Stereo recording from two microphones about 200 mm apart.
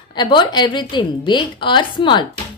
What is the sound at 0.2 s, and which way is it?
Speech, 20° left (ahead or behind).